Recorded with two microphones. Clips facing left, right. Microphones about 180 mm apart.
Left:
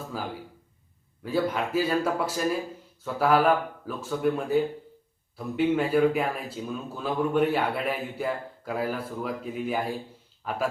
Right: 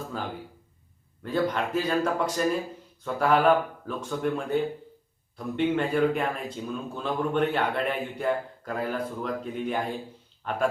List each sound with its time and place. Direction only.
0.1 s a man's voice: 5° left (ahead or behind)